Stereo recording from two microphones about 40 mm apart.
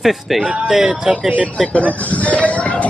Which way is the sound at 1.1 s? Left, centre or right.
Centre.